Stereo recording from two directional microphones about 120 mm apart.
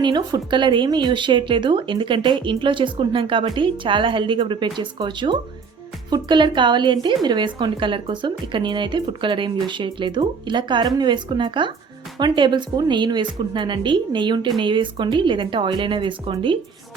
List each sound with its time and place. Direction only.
0.0 s a woman's voice: 35° right (ahead or behind)